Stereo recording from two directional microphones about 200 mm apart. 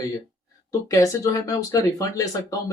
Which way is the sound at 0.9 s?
15° left (ahead or behind).